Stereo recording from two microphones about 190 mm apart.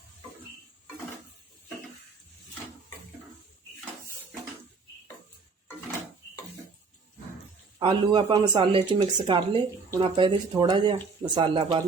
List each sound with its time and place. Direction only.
7.8 s speech: 25° right (ahead or behind)